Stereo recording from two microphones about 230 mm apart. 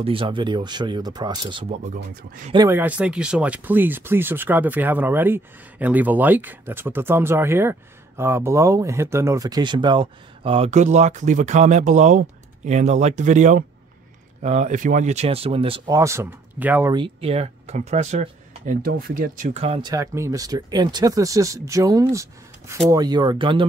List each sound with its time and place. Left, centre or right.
0.0 s speech: right
2.5 s speech: centre
16.9 s speech: right
18.9 s speech: right